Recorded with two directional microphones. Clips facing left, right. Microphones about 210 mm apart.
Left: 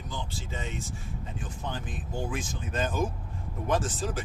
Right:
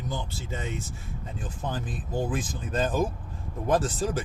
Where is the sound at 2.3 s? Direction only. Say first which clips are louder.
Right 3 dB; 35° right (ahead or behind).